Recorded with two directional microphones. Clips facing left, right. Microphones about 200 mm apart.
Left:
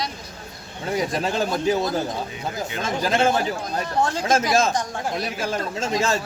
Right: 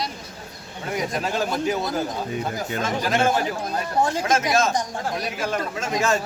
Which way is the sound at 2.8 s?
30° left (ahead or behind).